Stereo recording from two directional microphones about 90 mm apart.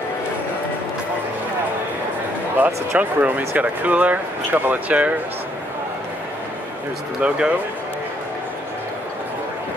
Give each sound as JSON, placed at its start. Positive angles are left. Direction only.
{"t": 2.6, "sound": "speech", "side_deg": -15}
{"t": 7.2, "sound": "speech", "side_deg": -10}